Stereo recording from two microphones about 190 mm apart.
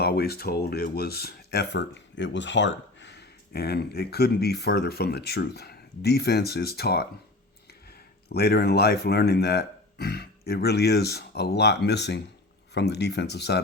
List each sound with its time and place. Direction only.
0.0 s speech: 55° left (ahead or behind)